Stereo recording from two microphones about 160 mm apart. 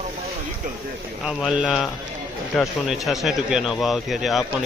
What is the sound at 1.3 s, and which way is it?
Speech, centre (ahead or behind).